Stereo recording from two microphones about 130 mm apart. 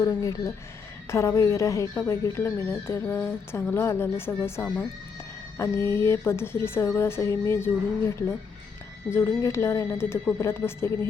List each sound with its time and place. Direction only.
0.0 s speech: 25° left (ahead or behind)